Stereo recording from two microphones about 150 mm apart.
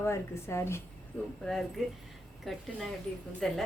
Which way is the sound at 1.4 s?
5° left (ahead or behind).